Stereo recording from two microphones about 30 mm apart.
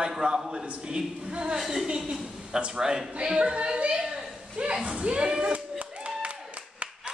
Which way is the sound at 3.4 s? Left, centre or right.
Right.